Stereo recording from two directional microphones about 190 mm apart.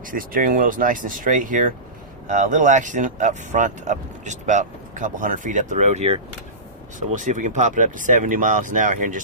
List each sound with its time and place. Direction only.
0.0 s speech: 45° right (ahead or behind)